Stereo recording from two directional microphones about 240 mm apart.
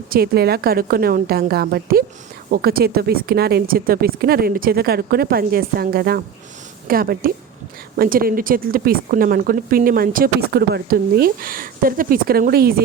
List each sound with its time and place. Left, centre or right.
0.1 s speech: right